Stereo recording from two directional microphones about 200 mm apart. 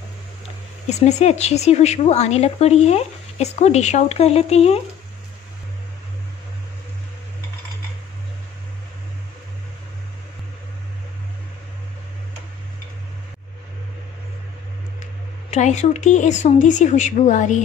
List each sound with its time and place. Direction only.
0.8 s speech: 35° left (ahead or behind)
15.5 s speech: 35° left (ahead or behind)